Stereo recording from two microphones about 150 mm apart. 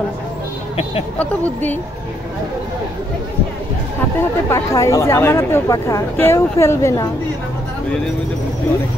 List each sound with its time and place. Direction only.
1.1 s speech: 10° left (ahead or behind)
4.5 s speech: 20° left (ahead or behind)